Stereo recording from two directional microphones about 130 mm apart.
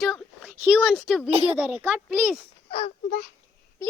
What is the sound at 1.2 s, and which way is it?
Speech, 50° right (ahead or behind).